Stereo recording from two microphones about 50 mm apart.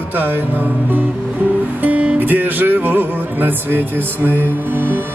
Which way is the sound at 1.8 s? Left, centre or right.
Right.